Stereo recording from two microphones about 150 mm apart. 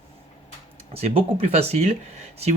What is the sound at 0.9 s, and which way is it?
Speech, 40° right (ahead or behind).